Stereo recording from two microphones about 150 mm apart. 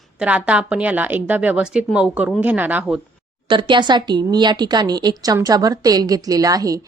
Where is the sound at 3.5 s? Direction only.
35° right (ahead or behind).